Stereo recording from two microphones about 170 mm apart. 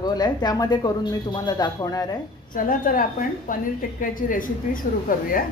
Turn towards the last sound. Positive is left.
turn(degrees=55)  # may be behind; listen again after turning